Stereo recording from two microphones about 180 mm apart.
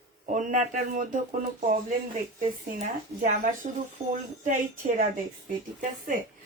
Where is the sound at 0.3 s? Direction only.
45° right (ahead or behind).